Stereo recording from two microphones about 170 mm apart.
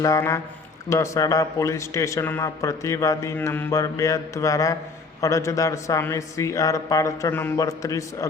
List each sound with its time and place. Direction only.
0.0 s a man's voice: 20° left (ahead or behind)